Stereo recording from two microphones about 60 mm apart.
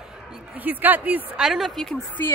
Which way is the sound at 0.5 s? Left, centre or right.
Right.